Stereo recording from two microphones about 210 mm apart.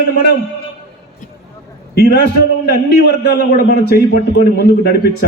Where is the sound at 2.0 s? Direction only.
50° left (ahead or behind).